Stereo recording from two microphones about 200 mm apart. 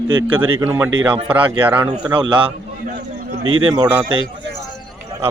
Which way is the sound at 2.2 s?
25° right (ahead or behind).